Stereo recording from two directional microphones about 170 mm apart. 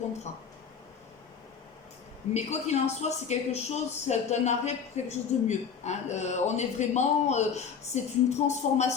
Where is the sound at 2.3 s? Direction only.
40° left (ahead or behind).